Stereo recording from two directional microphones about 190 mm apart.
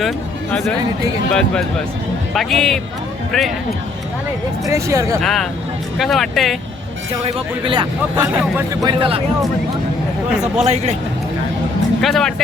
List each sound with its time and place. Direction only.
1.3 s speech: 5° left (ahead or behind)
4.6 s speech: 15° right (ahead or behind)
5.2 s speech: centre (ahead or behind)
7.3 s speech: 30° right (ahead or behind)
10.6 s a man's voice: 35° right (ahead or behind)
12.0 s speech: centre (ahead or behind)